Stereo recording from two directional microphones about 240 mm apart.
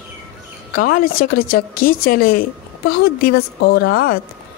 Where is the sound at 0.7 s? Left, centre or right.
Left.